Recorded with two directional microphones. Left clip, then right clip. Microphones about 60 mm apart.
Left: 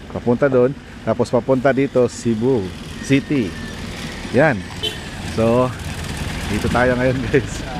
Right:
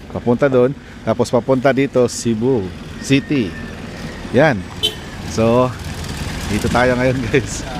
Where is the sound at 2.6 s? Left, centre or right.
Left.